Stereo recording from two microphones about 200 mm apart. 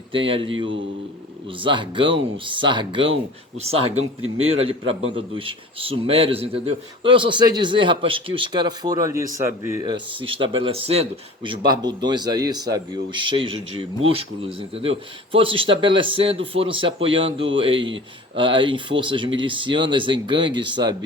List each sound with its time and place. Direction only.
0.1 s speech: 25° right (ahead or behind)
1.6 s speech: 25° right (ahead or behind)
4.4 s a man's voice: 90° right
4.6 s speech: 30° right (ahead or behind)